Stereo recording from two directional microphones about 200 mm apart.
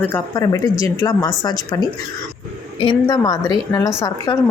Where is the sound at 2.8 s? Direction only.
20° left (ahead or behind).